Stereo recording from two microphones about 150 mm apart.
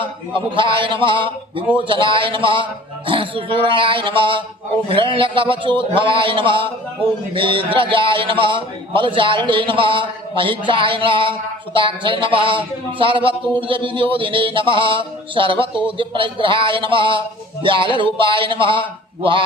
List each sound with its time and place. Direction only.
0.3 s a man's voice: 35° right (ahead or behind)